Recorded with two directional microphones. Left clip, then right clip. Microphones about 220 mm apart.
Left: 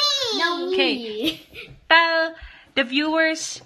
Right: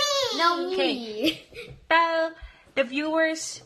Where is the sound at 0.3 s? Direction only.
20° right (ahead or behind).